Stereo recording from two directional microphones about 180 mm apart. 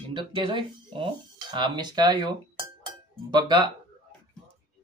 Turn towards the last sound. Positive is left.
turn(degrees=-25)  # may be behind; listen again after turning